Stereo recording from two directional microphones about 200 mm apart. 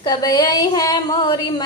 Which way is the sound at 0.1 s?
20° left (ahead or behind).